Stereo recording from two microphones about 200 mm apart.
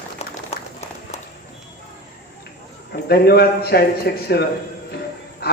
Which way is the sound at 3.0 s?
50° left (ahead or behind).